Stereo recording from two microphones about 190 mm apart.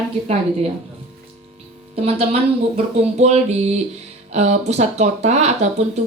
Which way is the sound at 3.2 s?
35° right (ahead or behind).